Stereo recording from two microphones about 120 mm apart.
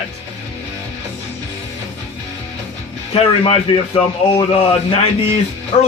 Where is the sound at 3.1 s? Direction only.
50° left (ahead or behind).